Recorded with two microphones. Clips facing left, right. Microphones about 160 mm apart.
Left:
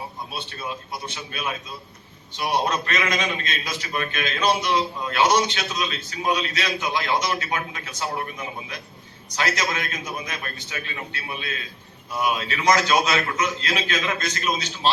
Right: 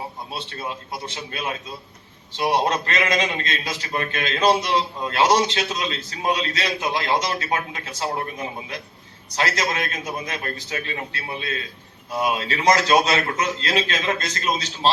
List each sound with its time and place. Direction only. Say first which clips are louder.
0.3 s a man's voice: right 1 dB; 30° right (ahead or behind)